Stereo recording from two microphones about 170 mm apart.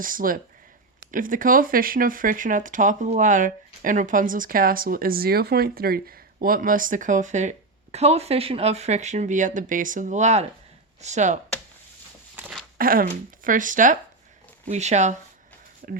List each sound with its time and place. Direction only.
0.0 s speech: 55° right (ahead or behind)
12.4 s a sound: 5° right (ahead or behind)
12.7 s speech: 60° right (ahead or behind); by 15.1 s 40° right (ahead or behind)
15.8 s speech: 55° right (ahead or behind)